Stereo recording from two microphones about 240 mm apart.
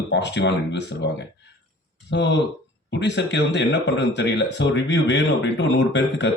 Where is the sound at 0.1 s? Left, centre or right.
Left.